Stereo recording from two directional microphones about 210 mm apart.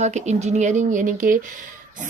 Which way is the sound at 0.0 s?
35° right (ahead or behind).